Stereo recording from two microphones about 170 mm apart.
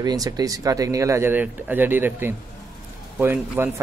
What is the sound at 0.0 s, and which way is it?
Speech, 20° right (ahead or behind).